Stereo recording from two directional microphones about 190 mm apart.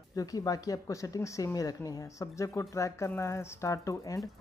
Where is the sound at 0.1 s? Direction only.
20° left (ahead or behind).